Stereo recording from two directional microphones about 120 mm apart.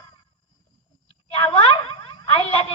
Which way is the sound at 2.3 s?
50° left (ahead or behind).